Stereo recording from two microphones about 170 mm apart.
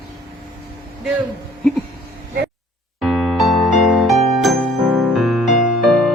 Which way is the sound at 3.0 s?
Centre (ahead or behind).